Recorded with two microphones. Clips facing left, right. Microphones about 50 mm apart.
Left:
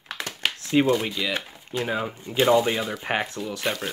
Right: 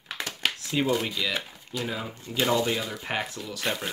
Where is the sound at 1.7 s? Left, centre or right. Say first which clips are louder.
Left 6 dB; left.